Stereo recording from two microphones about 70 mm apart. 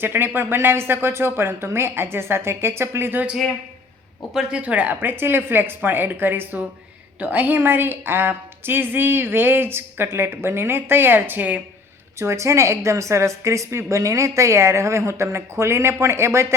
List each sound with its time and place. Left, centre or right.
0.0 s a woman's voice: right
4.4 s a woman's voice: centre
12.2 s a woman's voice: right